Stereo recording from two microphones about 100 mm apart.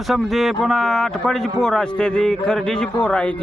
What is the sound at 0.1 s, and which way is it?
A man's voice, centre (ahead or behind).